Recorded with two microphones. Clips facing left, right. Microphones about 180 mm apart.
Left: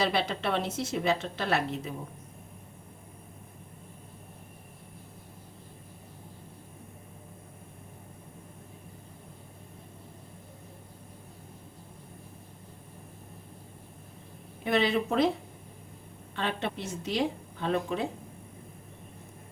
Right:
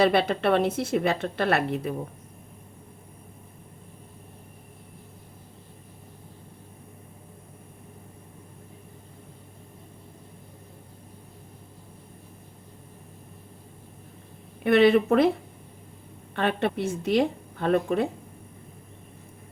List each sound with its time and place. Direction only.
0.0 s a woman's voice: 55° right (ahead or behind)
14.6 s a woman's voice: 60° right (ahead or behind)
16.3 s a woman's voice: 55° right (ahead or behind)